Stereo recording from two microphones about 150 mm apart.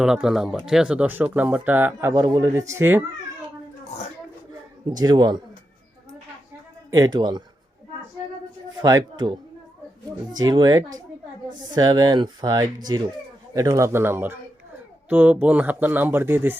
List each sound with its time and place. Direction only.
0.0 s speech: 5° right (ahead or behind)
4.9 s speech: 30° right (ahead or behind)
6.9 s speech: 25° right (ahead or behind)
8.8 s speech: 25° right (ahead or behind)